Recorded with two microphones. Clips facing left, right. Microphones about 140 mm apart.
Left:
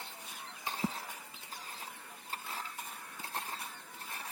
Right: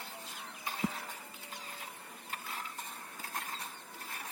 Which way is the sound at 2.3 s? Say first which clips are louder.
Left 1 dB; 30° left (ahead or behind).